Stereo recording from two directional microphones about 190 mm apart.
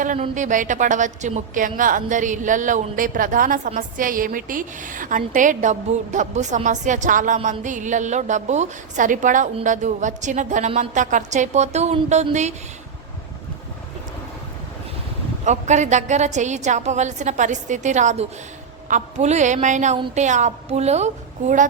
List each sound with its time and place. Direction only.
0.0 s a woman's voice: 40° right (ahead or behind)
15.4 s a woman's voice: 40° right (ahead or behind)